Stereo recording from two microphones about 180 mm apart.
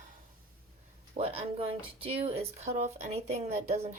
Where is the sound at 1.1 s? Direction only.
35° right (ahead or behind).